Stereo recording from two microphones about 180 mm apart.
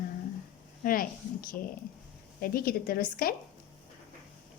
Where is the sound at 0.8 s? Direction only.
50° left (ahead or behind).